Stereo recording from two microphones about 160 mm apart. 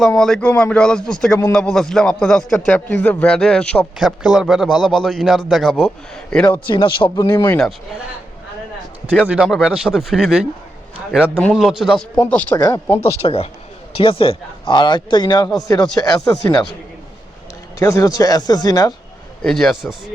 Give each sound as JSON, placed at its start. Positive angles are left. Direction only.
{"t": 0.0, "sound": "a man's voice", "side_deg": 5}
{"t": 6.7, "sound": "speech", "side_deg": 30}
{"t": 7.3, "sound": "speech", "side_deg": 15}
{"t": 9.2, "sound": "a man's voice", "side_deg": -5}
{"t": 13.2, "sound": "a man's voice", "side_deg": 40}
{"t": 17.7, "sound": "speech", "side_deg": 20}
{"t": 19.4, "sound": "a man's voice", "side_deg": 5}